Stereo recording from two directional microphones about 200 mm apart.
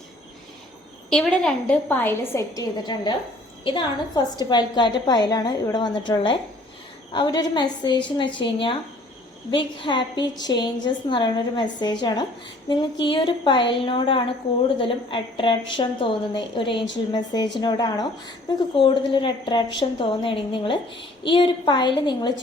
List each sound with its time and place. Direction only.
1.1 s a woman's voice: 5° left (ahead or behind); by 22.3 s 20° left (ahead or behind)